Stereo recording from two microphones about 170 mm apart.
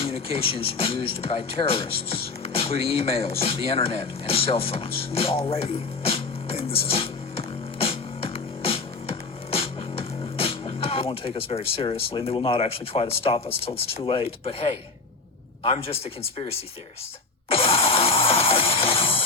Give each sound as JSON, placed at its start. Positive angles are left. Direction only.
{"t": 0.0, "sound": "speech", "side_deg": 35}
{"t": 2.4, "sound": "a sound", "side_deg": 35}
{"t": 11.1, "sound": "speech", "side_deg": 35}
{"t": 17.5, "sound": "music", "side_deg": 30}